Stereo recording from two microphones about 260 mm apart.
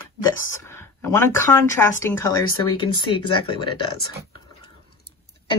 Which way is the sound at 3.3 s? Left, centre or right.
Centre.